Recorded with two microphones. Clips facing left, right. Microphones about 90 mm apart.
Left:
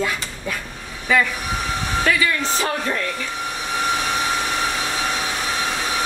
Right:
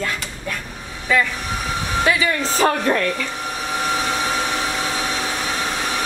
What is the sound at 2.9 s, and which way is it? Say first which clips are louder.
Speech: right 5 dB; 55° right (ahead or behind).